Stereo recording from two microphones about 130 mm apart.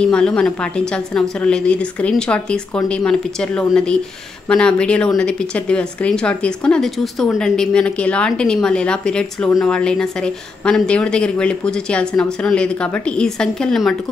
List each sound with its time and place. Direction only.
0.0 s a woman's voice: 5° left (ahead or behind)